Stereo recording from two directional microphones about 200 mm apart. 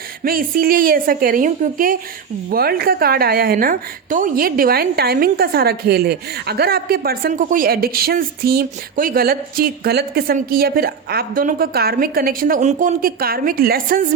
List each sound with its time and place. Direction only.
0.3 s a woman's voice: 45° right (ahead or behind)